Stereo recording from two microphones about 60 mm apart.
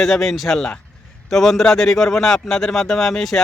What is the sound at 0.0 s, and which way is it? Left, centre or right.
Speech, centre.